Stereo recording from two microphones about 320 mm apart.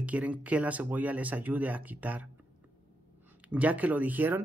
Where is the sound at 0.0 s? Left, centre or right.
Centre.